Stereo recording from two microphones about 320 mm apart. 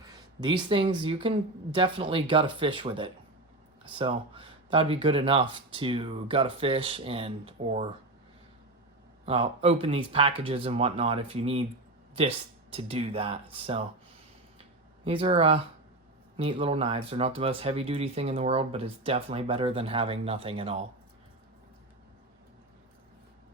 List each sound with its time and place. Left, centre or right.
0.4 s speech: centre
9.2 s speech: centre
12.7 s speech: centre
15.0 s speech: centre